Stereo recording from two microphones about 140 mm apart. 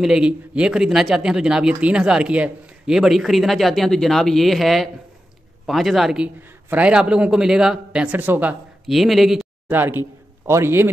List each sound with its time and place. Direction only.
0.0 s speech: 5° right (ahead or behind)
9.7 s a man's voice: 15° right (ahead or behind)